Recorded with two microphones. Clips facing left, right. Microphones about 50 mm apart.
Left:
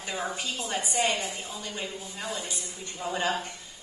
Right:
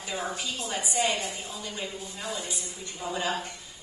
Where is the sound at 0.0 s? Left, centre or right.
Centre.